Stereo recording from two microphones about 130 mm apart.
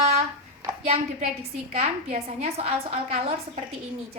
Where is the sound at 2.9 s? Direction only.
55° right (ahead or behind).